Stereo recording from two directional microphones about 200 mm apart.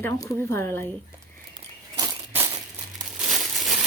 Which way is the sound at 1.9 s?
15° right (ahead or behind).